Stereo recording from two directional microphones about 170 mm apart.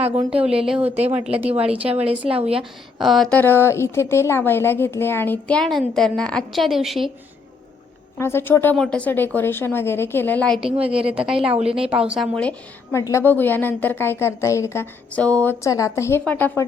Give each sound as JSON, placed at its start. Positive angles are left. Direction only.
{"t": 0.4, "sound": "a woman's voice", "side_deg": -5}
{"t": 1.7, "sound": "a woman's voice", "side_deg": -35}
{"t": 3.0, "sound": "a woman's voice", "side_deg": 0}
{"t": 8.2, "sound": "a woman's voice", "side_deg": 15}
{"t": 10.7, "sound": "a woman's voice", "side_deg": -5}